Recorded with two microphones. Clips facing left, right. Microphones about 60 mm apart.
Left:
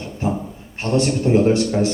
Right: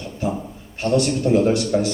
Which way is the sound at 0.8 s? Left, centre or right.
Left.